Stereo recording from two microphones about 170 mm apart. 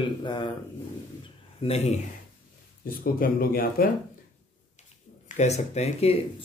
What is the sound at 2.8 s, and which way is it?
Speech, 60° left (ahead or behind).